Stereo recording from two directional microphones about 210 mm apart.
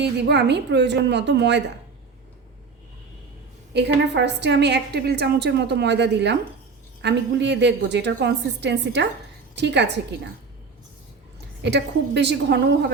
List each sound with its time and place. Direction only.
0.0 s a woman's voice: 55° right (ahead or behind)
3.8 s a woman's voice: 55° right (ahead or behind)
11.6 s a woman's voice: 55° right (ahead or behind)